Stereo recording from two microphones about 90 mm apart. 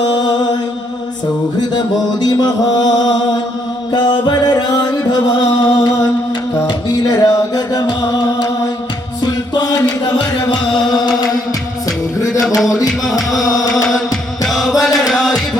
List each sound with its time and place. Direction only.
0.0 s mantra: 55° left (ahead or behind)
2.2 s mantra: 50° left (ahead or behind)
3.9 s music: 50° left (ahead or behind)
14.4 s chant: centre (ahead or behind)